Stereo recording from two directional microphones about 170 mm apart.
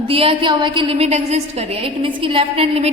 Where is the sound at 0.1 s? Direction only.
35° right (ahead or behind).